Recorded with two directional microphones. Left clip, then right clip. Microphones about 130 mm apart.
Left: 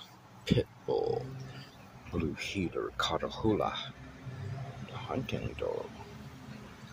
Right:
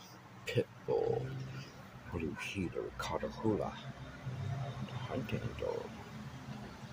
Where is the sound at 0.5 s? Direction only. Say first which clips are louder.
Left 3 dB; centre (ahead or behind).